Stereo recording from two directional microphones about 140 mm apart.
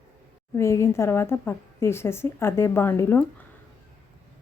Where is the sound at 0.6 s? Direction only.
20° left (ahead or behind).